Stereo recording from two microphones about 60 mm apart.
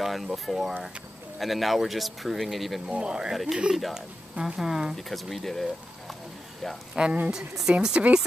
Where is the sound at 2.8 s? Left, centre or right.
Centre.